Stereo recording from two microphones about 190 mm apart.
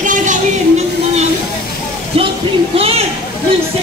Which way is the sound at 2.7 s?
30° right (ahead or behind).